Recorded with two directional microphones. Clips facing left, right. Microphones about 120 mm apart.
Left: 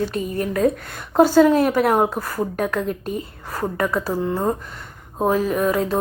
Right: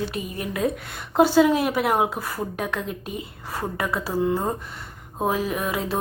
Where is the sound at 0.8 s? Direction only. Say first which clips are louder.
Left 3 dB; centre (ahead or behind).